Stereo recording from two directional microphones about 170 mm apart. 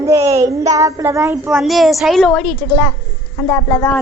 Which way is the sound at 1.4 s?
Centre (ahead or behind).